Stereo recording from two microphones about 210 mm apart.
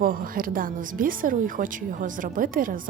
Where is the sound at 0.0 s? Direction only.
40° right (ahead or behind).